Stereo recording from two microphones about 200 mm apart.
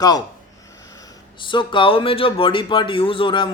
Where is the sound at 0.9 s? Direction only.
20° left (ahead or behind).